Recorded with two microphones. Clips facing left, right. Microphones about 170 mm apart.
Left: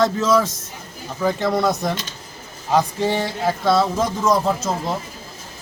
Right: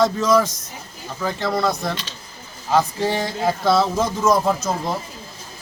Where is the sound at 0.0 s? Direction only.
Centre (ahead or behind).